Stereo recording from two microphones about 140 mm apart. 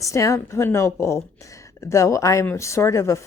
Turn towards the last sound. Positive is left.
turn(degrees=20)  # may be behind; listen again after turning